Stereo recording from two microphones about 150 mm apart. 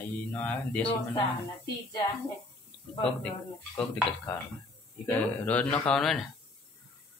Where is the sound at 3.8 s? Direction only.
Centre (ahead or behind).